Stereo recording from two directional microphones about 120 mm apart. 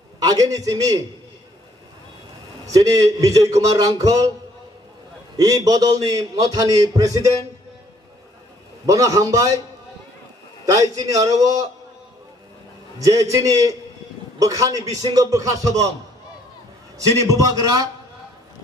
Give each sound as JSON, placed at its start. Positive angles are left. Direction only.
{"t": 0.2, "sound": "a man's voice", "side_deg": -30}
{"t": 2.6, "sound": "a man's voice", "side_deg": -30}
{"t": 5.4, "sound": "a man's voice", "side_deg": -30}
{"t": 8.8, "sound": "a man's voice", "side_deg": -30}
{"t": 10.6, "sound": "a man's voice", "side_deg": -30}
{"t": 13.0, "sound": "a man's voice", "side_deg": -30}
{"t": 17.2, "sound": "a man's voice", "side_deg": -30}